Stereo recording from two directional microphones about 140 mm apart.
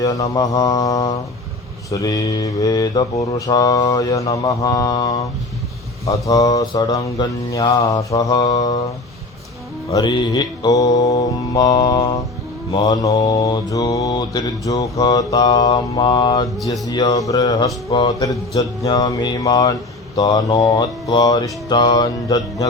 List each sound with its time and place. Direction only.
0.0 s mantra: 25° left (ahead or behind)
9.9 s mantra: 30° left (ahead or behind)